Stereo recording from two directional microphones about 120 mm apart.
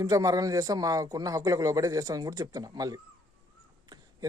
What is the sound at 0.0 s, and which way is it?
A man's voice, 30° right (ahead or behind).